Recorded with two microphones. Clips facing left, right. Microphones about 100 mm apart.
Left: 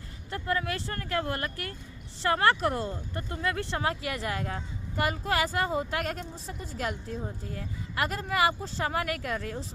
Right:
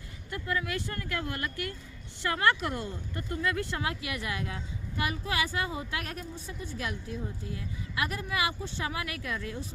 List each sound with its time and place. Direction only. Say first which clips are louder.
0.3 s speech: left 3 dB; 35° left (ahead or behind)